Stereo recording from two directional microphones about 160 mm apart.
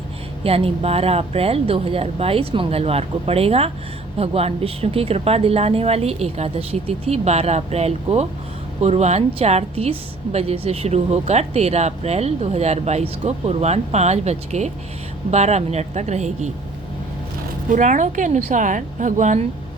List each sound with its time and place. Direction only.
0.4 s a woman's voice: 40° right (ahead or behind)
17.7 s a woman's voice: 50° right (ahead or behind)